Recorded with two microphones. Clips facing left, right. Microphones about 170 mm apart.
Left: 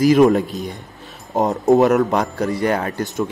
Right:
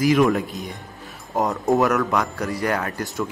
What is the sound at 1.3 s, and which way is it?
Speech, 20° left (ahead or behind).